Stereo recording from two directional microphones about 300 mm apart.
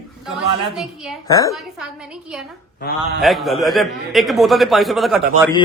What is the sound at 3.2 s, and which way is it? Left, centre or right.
Speech, centre.